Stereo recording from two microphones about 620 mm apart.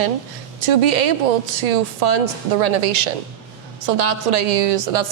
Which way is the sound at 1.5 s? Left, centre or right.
Right.